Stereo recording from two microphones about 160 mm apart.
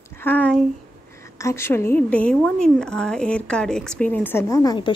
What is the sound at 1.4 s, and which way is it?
A woman's voice, 15° left (ahead or behind).